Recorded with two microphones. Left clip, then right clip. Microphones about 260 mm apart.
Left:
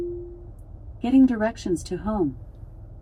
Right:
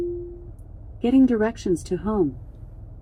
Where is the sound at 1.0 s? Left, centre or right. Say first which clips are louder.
Right 1 dB; left.